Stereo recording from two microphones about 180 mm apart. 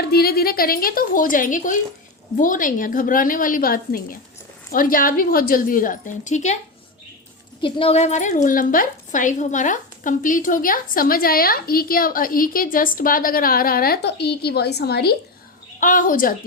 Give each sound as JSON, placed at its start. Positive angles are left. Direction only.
{"t": 0.1, "sound": "a woman's voice", "side_deg": 60}
{"t": 7.6, "sound": "a woman's voice", "side_deg": 30}
{"t": 15.8, "sound": "a woman's voice", "side_deg": 50}